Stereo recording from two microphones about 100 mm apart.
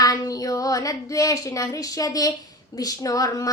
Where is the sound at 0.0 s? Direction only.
40° left (ahead or behind).